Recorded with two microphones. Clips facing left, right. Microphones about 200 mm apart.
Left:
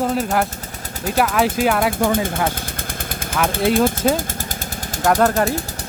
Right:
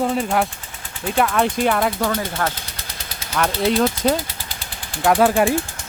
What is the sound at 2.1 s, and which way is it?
Speech, 50° left (ahead or behind).